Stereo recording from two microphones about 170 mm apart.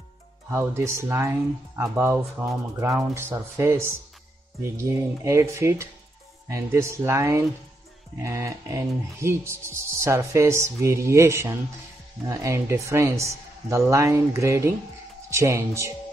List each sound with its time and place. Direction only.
0.5 s speech: 15° right (ahead or behind)